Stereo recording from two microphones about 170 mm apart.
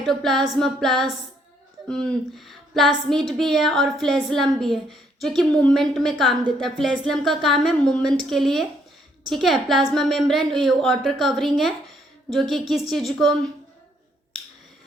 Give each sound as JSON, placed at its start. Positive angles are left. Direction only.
{"t": 0.0, "sound": "a woman's voice", "side_deg": 0}